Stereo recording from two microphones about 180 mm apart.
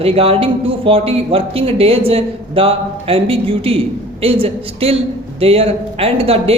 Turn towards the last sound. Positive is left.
turn(degrees=-35)  # may be behind; listen again after turning